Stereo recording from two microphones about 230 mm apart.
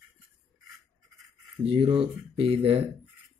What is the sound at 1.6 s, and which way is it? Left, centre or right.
Speech, right.